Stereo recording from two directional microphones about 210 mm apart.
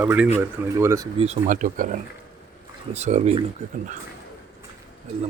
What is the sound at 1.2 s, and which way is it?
Speech, 35° right (ahead or behind).